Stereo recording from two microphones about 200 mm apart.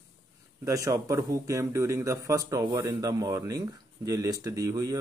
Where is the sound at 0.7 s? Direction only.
15° right (ahead or behind).